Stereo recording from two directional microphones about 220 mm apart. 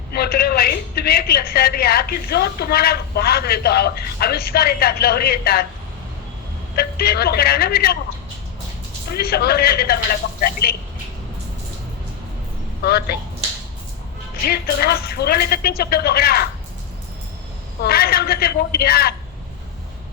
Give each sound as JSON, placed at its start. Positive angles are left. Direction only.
{"t": 0.1, "sound": "a woman's voice", "side_deg": 45}
{"t": 6.7, "sound": "a woman's voice", "side_deg": 45}
{"t": 9.0, "sound": "a woman's voice", "side_deg": 45}
{"t": 12.8, "sound": "a woman's voice", "side_deg": 45}
{"t": 14.4, "sound": "a woman's voice", "side_deg": 45}
{"t": 17.8, "sound": "a woman's voice", "side_deg": 45}